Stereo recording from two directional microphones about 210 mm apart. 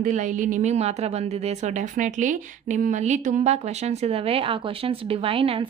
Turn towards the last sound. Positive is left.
turn(degrees=-25)  # may be behind; listen again after turning